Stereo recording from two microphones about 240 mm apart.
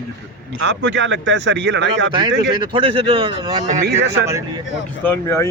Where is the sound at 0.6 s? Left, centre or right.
Right.